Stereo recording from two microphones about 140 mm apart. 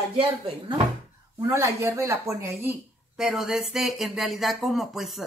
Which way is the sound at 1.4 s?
20° right (ahead or behind).